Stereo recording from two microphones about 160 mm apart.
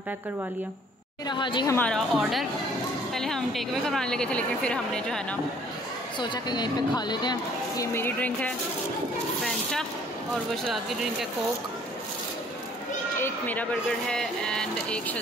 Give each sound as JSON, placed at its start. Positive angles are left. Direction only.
{"t": 1.2, "sound": "speech", "side_deg": 30}
{"t": 1.8, "sound": "a woman's voice", "side_deg": 5}
{"t": 6.1, "sound": "speech", "side_deg": 30}
{"t": 9.4, "sound": "a sound", "side_deg": 5}
{"t": 10.5, "sound": "a woman's voice", "side_deg": 0}
{"t": 13.2, "sound": "a woman's voice", "side_deg": 10}